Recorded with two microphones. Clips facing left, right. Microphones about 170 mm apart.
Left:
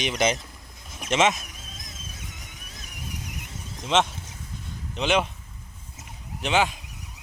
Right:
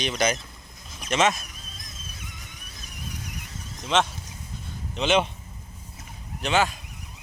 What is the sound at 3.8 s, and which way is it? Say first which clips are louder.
Speech: left 1 dB; 20° left (ahead or behind).